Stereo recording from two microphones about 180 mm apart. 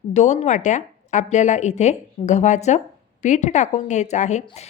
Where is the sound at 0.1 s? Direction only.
40° left (ahead or behind).